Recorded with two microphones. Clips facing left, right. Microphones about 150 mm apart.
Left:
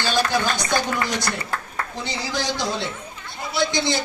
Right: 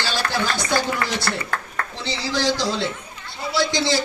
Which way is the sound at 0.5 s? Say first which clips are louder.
Right 1 dB; 20° left (ahead or behind).